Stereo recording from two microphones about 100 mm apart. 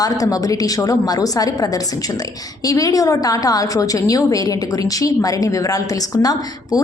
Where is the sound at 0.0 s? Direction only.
35° left (ahead or behind).